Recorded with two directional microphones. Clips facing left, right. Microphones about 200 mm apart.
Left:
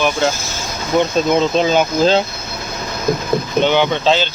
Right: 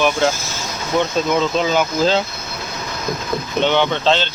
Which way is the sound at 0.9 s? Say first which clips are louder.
Left 3 dB; 20° left (ahead or behind).